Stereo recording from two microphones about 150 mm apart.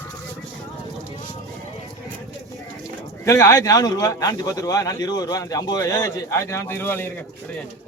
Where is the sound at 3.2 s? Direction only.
20° left (ahead or behind).